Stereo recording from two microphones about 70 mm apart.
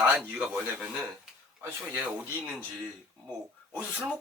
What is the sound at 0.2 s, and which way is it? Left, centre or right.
Speech, centre.